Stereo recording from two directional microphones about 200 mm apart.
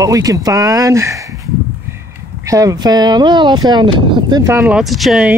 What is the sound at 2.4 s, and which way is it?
Speech, 15° right (ahead or behind).